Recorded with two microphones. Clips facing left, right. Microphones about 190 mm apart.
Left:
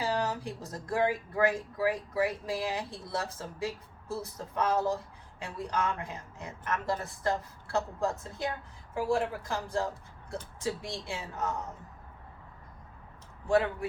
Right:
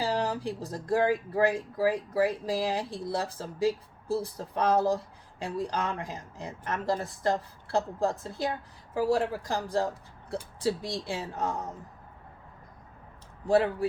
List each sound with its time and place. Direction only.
0.0 s speech: 30° right (ahead or behind)
13.5 s speech: 35° right (ahead or behind)